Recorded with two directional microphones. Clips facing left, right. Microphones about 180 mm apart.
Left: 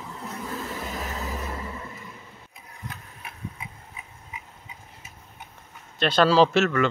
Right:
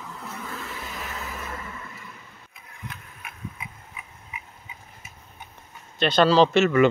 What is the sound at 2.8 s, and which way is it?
Engine, 35° left (ahead or behind).